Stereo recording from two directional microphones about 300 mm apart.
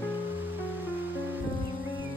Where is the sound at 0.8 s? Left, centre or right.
Centre.